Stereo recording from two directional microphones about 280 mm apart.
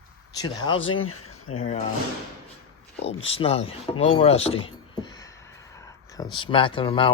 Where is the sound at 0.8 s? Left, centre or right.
Left.